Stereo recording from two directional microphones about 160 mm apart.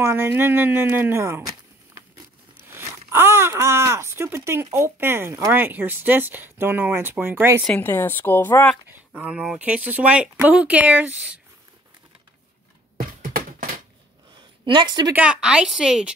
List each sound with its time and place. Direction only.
0.0 s speech: 15° right (ahead or behind)
2.7 s speech: 15° right (ahead or behind)
7.6 s speech: 10° left (ahead or behind)
8.8 s speech: 10° right (ahead or behind)
12.9 s a sound: 60° right (ahead or behind)
14.3 s a sound: 30° right (ahead or behind)
15.1 s a woman's voice: 5° right (ahead or behind)